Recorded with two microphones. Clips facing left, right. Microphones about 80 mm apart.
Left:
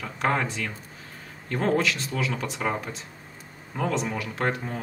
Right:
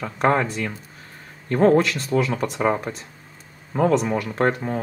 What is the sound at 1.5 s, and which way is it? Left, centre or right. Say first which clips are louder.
Speech: right 8 dB; right.